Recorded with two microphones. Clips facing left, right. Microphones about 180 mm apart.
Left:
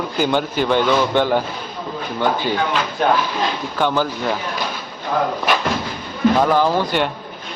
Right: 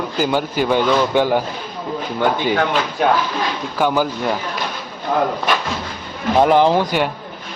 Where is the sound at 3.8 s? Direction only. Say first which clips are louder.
Right 2 dB; 10° right (ahead or behind).